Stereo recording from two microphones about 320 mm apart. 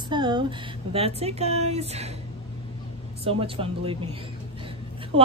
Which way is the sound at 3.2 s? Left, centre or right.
Centre.